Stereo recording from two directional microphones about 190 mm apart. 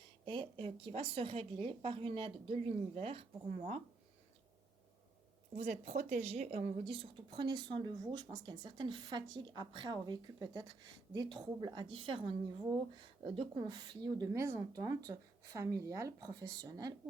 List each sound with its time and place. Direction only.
0.3 s speech: 25° right (ahead or behind)
5.5 s speech: 35° right (ahead or behind); by 16.9 s 20° right (ahead or behind)